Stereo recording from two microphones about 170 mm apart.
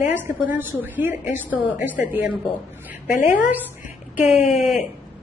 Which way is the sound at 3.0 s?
50° left (ahead or behind).